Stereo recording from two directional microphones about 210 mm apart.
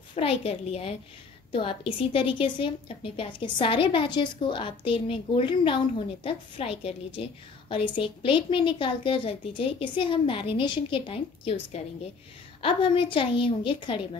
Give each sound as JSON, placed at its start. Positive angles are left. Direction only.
{"t": 0.1, "sound": "a woman's voice", "side_deg": 30}
{"t": 12.6, "sound": "a woman's voice", "side_deg": 25}